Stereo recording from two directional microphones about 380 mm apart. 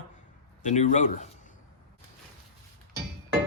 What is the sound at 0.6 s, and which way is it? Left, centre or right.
Speech, centre.